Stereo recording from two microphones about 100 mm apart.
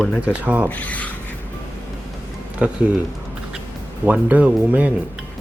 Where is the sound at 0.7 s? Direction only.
15° left (ahead or behind).